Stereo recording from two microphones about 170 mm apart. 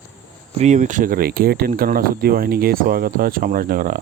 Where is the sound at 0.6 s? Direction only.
45° right (ahead or behind).